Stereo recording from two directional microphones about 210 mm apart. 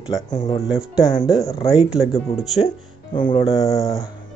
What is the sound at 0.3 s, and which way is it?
Speech, 30° left (ahead or behind).